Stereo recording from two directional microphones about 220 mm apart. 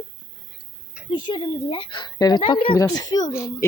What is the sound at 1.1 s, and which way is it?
Speech, 20° left (ahead or behind).